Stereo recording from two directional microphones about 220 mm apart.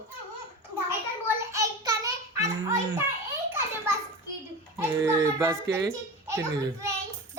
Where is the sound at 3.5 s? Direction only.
10° right (ahead or behind).